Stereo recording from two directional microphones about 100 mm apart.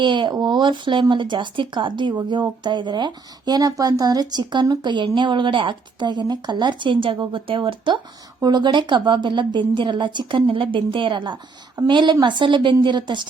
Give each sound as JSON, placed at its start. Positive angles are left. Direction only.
{"t": 0.0, "sound": "speech", "side_deg": -50}
{"t": 8.4, "sound": "speech", "side_deg": -45}